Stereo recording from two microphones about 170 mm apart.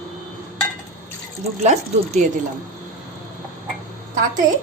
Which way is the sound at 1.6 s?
45° right (ahead or behind).